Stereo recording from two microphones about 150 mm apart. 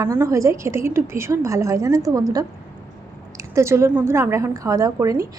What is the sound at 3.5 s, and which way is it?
A woman's voice, 20° right (ahead or behind).